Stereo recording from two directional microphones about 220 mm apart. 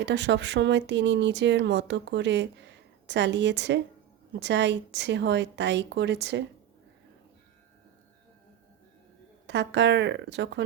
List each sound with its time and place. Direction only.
0.0 s speech: 50° right (ahead or behind)
9.5 s speech: 50° right (ahead or behind)